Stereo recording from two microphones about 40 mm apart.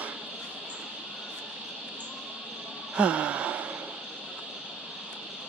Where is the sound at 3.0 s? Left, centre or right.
Right.